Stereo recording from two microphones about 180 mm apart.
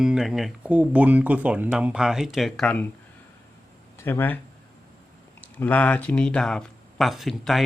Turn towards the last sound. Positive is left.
turn(degrees=0)  # may be behind; listen again after turning